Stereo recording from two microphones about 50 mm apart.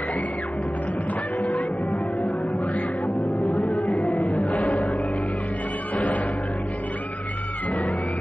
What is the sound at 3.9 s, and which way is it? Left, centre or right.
Music, left.